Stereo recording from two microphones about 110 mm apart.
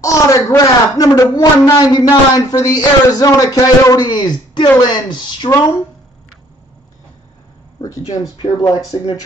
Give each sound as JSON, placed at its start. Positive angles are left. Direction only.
{"t": 0.0, "sound": "a man's voice", "side_deg": 30}
{"t": 7.8, "sound": "a man's voice", "side_deg": 30}